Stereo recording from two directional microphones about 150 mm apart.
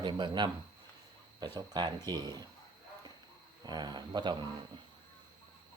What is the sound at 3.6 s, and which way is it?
Speech, 30° right (ahead or behind).